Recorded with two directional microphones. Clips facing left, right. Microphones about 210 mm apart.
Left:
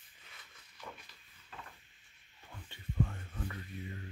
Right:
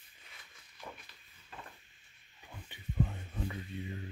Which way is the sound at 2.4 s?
15° right (ahead or behind).